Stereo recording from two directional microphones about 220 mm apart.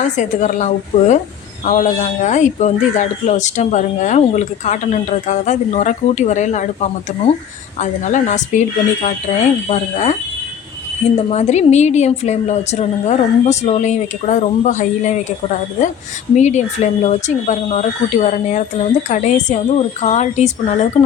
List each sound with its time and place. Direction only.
0.0 s speech: 35° left (ahead or behind)
7.8 s speech: 35° left (ahead or behind)
11.3 s speech: 30° left (ahead or behind)
16.3 s speech: 30° left (ahead or behind)